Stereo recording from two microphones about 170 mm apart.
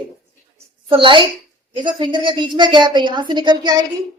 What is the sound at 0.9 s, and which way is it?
A woman's voice, 30° right (ahead or behind).